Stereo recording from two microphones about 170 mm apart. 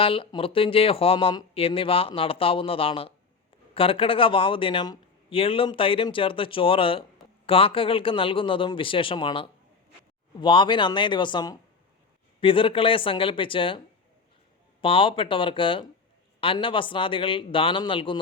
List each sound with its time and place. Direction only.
0.0 s speech: 30° left (ahead or behind)